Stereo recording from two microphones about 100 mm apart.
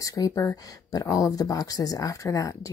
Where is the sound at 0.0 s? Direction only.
35° left (ahead or behind).